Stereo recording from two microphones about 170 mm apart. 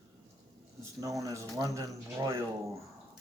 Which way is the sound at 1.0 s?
20° right (ahead or behind).